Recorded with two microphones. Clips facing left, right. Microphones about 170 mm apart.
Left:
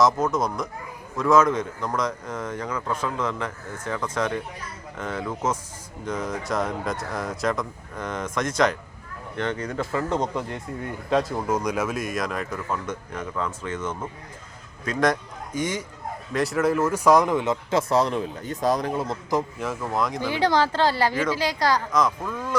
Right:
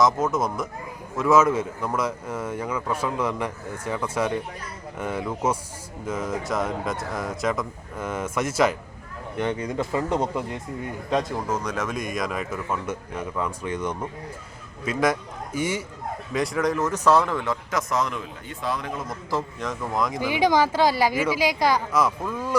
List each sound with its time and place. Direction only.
0.0 s a man's voice: centre (ahead or behind); by 19.1 s 35° left (ahead or behind)
19.3 s speech: 10° left (ahead or behind)
20.2 s speech: 15° right (ahead or behind)